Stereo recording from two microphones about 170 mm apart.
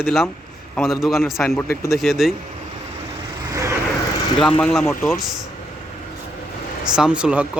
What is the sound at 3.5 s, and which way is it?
Vehicle, 20° right (ahead or behind).